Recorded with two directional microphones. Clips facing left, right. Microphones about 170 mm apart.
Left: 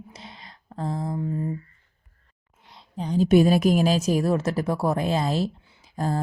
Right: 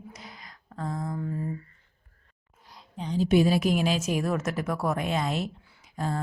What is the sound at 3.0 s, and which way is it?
Speech, 45° left (ahead or behind).